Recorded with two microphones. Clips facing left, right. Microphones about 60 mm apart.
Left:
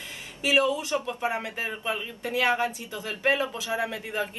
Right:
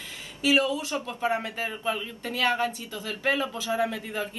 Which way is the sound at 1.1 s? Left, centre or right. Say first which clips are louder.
Right 2 dB; centre.